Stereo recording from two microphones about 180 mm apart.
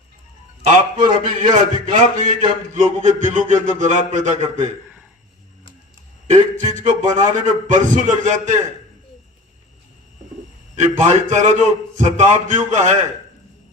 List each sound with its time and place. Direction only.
1.2 s a man's voice: 45° right (ahead or behind)
6.2 s a man's voice: 40° right (ahead or behind)
10.8 s a man's voice: 40° right (ahead or behind)